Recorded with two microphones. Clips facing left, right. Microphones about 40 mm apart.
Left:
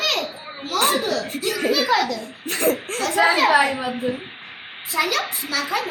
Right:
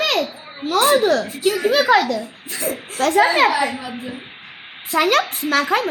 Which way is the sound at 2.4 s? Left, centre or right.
Left.